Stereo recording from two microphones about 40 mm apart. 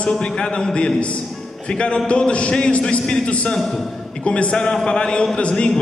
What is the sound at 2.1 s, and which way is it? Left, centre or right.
A man's voice, left.